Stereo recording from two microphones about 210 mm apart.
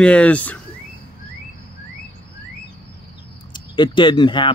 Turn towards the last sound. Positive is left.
turn(degrees=20)  # may be behind; listen again after turning